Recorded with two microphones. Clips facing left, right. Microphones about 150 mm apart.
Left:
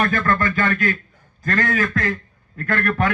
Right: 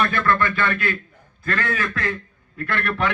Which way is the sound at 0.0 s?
45° left (ahead or behind).